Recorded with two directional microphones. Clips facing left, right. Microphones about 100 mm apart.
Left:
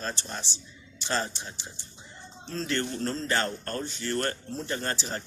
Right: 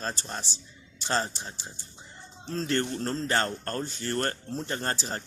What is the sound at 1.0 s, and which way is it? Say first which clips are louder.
Speech: right 1 dB; 35° right (ahead or behind).